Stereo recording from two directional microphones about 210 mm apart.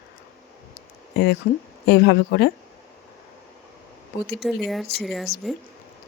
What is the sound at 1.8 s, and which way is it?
Speech, 55° left (ahead or behind).